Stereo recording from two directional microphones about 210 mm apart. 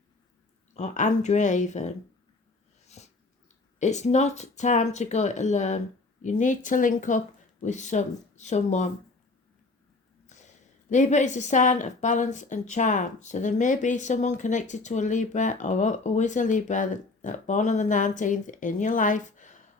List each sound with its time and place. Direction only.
0.7 s a woman's voice: 35° left (ahead or behind)
2.8 s dog: 30° left (ahead or behind)
3.8 s a woman's voice: 35° left (ahead or behind)
10.2 s a woman's voice: 35° left (ahead or behind)